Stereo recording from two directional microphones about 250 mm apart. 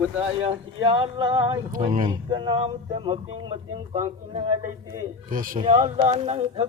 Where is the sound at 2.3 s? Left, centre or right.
Centre.